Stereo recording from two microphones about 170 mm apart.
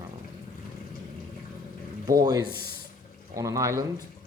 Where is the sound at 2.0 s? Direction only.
20° right (ahead or behind).